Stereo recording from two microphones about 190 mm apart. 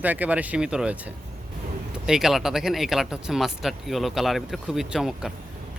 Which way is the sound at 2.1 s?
Centre (ahead or behind).